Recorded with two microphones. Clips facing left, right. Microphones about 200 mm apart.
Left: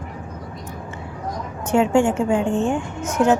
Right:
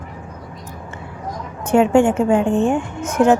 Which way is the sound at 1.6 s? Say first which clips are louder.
Right 3 dB; 60° right (ahead or behind).